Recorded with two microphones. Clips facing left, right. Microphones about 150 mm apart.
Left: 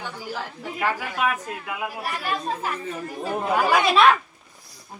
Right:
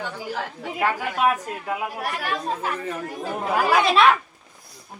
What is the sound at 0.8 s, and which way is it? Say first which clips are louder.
A woman's voice: right 3 dB; 35° right (ahead or behind).